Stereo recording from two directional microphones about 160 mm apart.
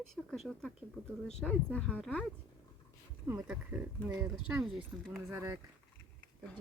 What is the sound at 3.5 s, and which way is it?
Speech, 10° right (ahead or behind).